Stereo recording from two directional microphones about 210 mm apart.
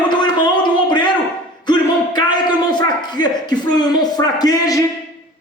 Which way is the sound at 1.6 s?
20° left (ahead or behind).